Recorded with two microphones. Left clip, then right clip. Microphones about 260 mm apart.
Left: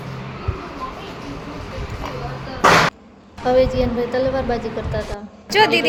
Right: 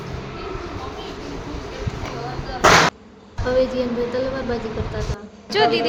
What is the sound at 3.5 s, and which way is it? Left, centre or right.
Speech, centre.